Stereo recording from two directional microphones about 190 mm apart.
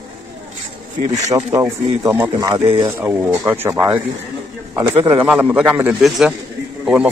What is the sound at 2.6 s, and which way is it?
Speech, 30° right (ahead or behind).